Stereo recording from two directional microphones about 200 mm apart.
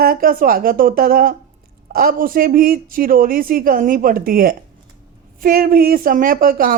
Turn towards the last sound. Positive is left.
turn(degrees=-45)  # may be behind; listen again after turning